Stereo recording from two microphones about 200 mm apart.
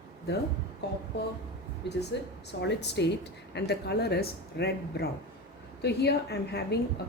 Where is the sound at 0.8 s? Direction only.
55° left (ahead or behind).